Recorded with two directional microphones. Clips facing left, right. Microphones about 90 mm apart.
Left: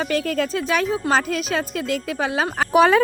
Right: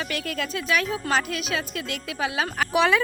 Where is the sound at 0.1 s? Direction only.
35° left (ahead or behind).